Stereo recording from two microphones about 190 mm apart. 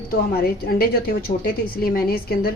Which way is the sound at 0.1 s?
55° left (ahead or behind).